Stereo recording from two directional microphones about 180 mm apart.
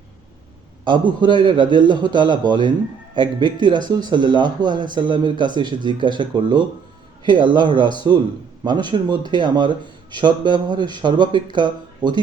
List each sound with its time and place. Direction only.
0.9 s speech: 25° right (ahead or behind)